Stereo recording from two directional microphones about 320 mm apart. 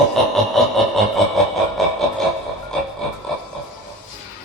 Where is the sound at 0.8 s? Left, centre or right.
Centre.